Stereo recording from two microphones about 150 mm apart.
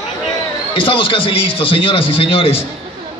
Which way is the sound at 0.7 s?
35° left (ahead or behind).